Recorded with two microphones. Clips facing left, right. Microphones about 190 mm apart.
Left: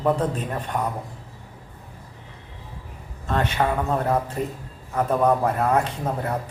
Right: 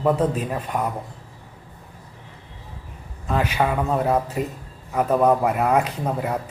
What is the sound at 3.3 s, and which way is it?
A man's voice, 5° right (ahead or behind).